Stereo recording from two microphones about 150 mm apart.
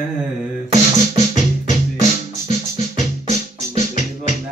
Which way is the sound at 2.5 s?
55° left (ahead or behind).